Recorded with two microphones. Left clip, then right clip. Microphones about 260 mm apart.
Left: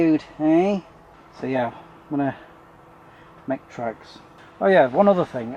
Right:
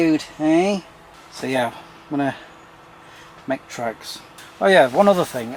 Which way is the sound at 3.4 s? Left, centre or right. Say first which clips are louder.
Right 2 dB; centre.